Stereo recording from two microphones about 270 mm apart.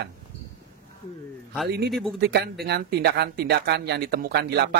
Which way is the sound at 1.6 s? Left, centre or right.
Right.